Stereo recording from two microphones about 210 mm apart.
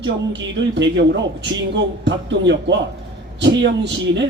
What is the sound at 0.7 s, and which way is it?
A man's voice, 60° right (ahead or behind).